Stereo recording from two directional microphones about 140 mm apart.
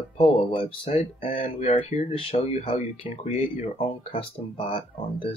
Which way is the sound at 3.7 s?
40° left (ahead or behind).